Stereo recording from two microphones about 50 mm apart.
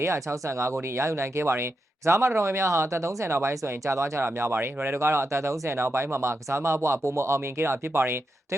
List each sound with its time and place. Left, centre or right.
0.0 s speech: right
4.2 s speech: right